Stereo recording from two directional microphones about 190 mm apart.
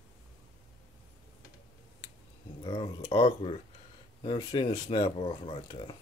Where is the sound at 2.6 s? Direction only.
25° left (ahead or behind).